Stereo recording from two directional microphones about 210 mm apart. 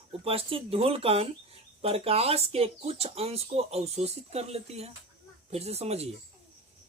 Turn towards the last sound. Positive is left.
turn(degrees=-30)  # may be behind; listen again after turning